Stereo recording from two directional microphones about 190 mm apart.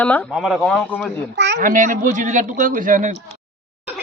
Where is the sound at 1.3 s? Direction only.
65° right (ahead or behind).